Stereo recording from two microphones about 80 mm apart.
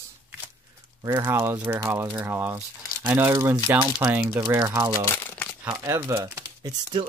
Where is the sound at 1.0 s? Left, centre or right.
Right.